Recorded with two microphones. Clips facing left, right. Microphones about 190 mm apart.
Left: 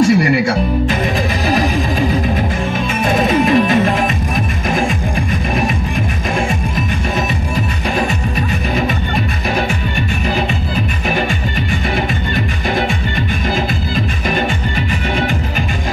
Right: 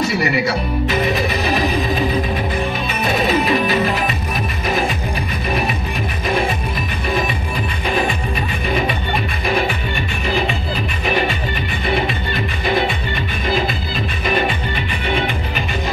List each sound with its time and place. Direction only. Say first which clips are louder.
0.0 s music: left 6 dB; 45° left (ahead or behind)
12.6 s music: right 1 dB; 45° left (ahead or behind)